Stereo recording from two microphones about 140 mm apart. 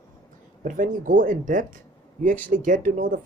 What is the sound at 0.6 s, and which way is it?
Speech, 70° right (ahead or behind).